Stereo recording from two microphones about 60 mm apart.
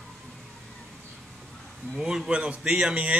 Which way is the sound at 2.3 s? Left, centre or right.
Centre.